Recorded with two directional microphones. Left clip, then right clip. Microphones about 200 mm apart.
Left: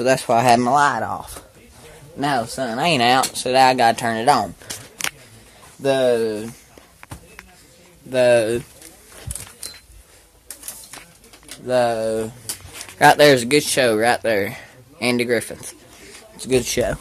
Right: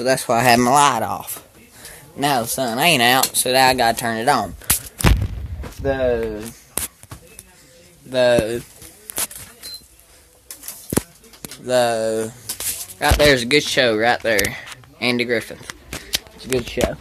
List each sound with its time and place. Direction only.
0.0 s speech: 5° left (ahead or behind)
0.3 s speech: 5° right (ahead or behind)
2.4 s speech: 10° right (ahead or behind)
5.8 s speech: 25° left (ahead or behind)
8.1 s speech: 10° left (ahead or behind)
11.6 s speech: 5° right (ahead or behind)
13.2 s speech: 10° left (ahead or behind)
16.3 s a sound: 15° left (ahead or behind)